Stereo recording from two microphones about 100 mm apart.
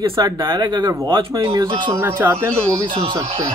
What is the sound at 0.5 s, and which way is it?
Speech, 45° right (ahead or behind).